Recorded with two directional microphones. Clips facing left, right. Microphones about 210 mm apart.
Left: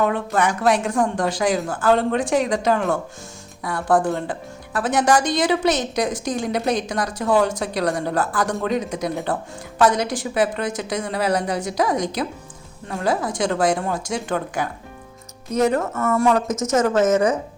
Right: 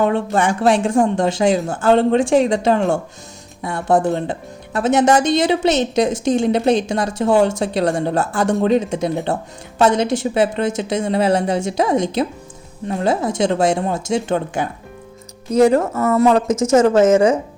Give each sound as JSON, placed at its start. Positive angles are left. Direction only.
{"t": 0.0, "sound": "speech", "side_deg": -25}